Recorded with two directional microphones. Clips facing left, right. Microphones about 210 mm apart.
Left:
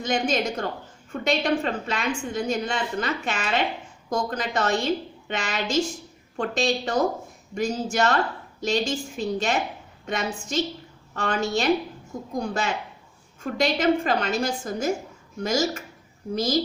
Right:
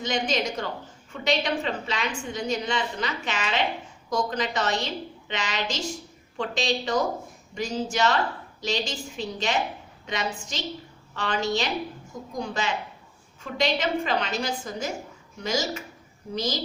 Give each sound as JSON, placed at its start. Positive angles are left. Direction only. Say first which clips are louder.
{"t": 0.0, "sound": "a woman's voice", "louder": "left 2 dB", "side_deg": 50}